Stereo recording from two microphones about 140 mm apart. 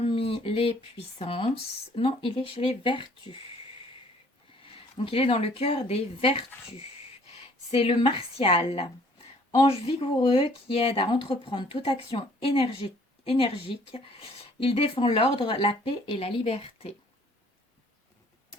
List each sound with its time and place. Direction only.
0.0 s speech: 40° left (ahead or behind)
4.6 s speech: 40° left (ahead or behind)